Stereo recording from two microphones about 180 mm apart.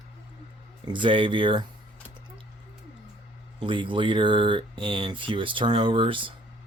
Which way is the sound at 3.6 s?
30° right (ahead or behind).